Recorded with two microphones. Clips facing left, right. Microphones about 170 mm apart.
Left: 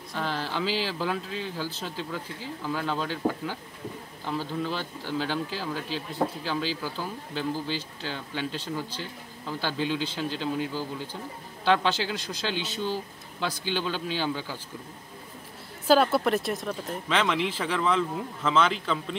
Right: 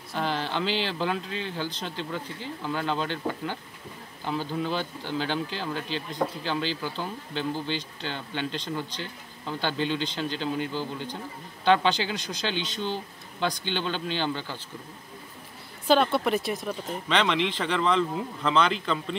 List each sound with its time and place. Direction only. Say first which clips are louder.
0.1 s speech: right 2 dB; centre (ahead or behind)
15.9 s speech: left 1 dB; 5° left (ahead or behind)